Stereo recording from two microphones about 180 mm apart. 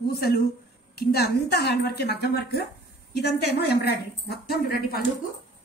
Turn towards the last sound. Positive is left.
turn(degrees=60)  # may be behind; listen again after turning